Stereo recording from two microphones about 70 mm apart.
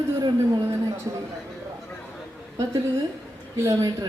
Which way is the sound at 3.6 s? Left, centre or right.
Right.